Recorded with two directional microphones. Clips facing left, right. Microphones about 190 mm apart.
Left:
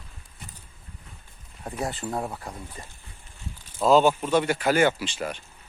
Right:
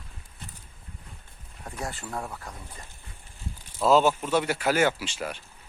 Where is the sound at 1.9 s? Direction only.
20° left (ahead or behind).